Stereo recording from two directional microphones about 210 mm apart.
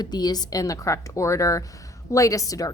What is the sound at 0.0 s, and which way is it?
A woman's voice, 20° left (ahead or behind).